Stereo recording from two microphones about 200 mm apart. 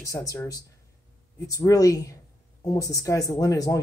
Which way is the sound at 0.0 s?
15° left (ahead or behind).